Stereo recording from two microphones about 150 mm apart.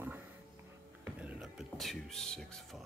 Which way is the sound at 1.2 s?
5° right (ahead or behind).